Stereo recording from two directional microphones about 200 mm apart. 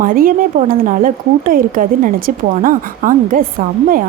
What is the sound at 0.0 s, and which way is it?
A woman's voice, 45° right (ahead or behind).